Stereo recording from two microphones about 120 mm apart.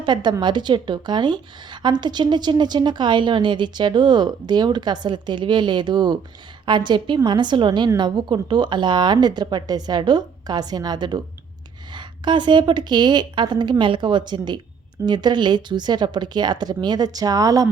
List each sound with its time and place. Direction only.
0.0 s a woman's voice: 40° right (ahead or behind)